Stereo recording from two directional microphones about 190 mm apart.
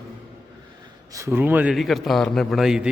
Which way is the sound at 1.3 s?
10° right (ahead or behind).